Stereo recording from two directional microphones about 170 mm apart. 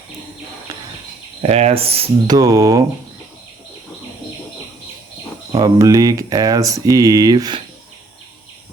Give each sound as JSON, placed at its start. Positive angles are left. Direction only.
{"t": 1.4, "sound": "cricket", "side_deg": -40}
{"t": 2.2, "sound": "speech", "side_deg": -20}
{"t": 5.5, "sound": "speech", "side_deg": -20}